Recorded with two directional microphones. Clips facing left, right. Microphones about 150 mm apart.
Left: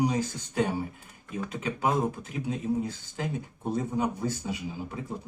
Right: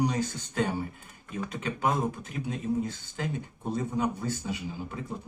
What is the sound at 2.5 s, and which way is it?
Speech, 10° left (ahead or behind).